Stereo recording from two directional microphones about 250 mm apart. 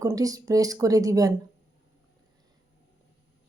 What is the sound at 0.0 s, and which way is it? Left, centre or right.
A woman's voice, centre.